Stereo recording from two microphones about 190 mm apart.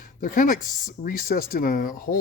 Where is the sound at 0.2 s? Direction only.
45° left (ahead or behind).